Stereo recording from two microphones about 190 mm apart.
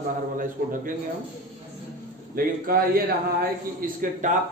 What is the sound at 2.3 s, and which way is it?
A man's voice, 50° right (ahead or behind).